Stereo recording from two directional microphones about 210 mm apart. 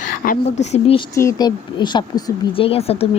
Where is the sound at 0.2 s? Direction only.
45° left (ahead or behind).